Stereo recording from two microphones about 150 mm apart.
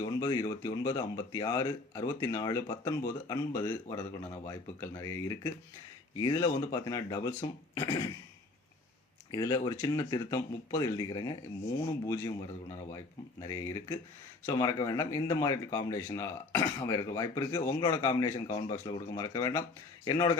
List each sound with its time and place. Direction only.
0.0 s speech: 25° left (ahead or behind)
9.3 s speech: 25° left (ahead or behind)
13.4 s speech: 20° left (ahead or behind)